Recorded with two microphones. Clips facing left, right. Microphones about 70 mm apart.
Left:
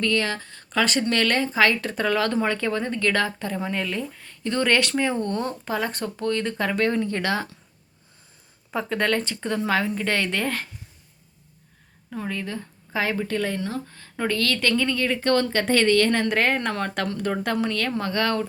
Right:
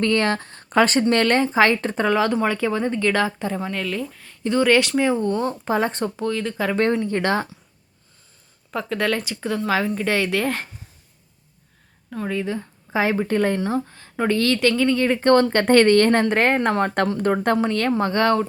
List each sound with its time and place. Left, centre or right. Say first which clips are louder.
0.0 s speech: right 4 dB; right; by 3.6 s centre
3.6 s speech: right 1 dB; centre
4.4 s speech: right 4 dB; centre
5.6 s speech: right 5 dB; right
6.1 s speech: right 1 dB; centre
7.1 s speech: right 4 dB; right
8.7 s speech: right 1 dB; centre
12.1 s speech: right 5 dB; centre; by 13.7 s right
13.9 s speech: right 5 dB; centre
14.7 s speech: right 4 dB; centre
14.9 s speech: right 6 dB; right
15.6 s a woman's voice: right 5 dB; right
16.2 s speech: right 4 dB; right